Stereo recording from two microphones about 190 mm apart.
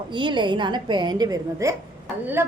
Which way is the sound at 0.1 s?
25° right (ahead or behind).